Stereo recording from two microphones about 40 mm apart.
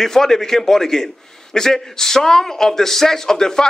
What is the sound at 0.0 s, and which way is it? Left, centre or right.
A man's voice, centre.